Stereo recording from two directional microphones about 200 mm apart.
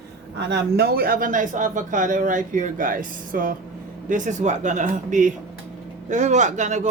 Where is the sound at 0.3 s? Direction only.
55° right (ahead or behind).